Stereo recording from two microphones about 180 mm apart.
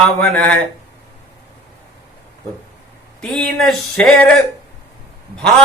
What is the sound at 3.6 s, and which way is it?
Speech, 5° left (ahead or behind).